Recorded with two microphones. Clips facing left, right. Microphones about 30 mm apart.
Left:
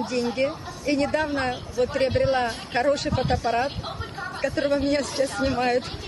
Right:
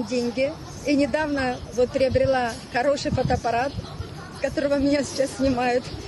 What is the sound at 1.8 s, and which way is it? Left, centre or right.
Speech, left.